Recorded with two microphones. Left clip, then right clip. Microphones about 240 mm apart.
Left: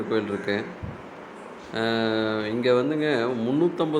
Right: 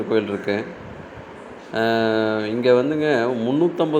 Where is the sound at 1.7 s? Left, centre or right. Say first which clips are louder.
Right 6 dB; centre.